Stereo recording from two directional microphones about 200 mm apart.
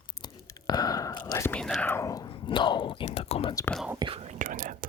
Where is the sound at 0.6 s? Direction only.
20° left (ahead or behind).